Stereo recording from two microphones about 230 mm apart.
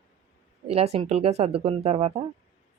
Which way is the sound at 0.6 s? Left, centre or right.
Right.